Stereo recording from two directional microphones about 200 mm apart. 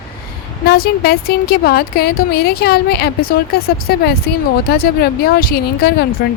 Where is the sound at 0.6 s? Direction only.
50° left (ahead or behind).